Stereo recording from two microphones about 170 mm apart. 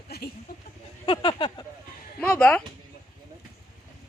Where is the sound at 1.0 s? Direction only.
30° left (ahead or behind).